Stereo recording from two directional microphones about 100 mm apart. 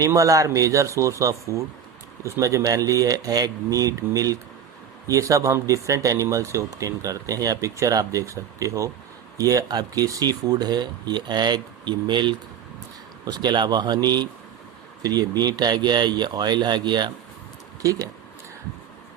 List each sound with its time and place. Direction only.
0.0 s speech: 35° right (ahead or behind)